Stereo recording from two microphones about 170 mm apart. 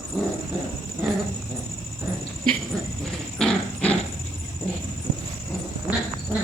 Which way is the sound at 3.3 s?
5° left (ahead or behind).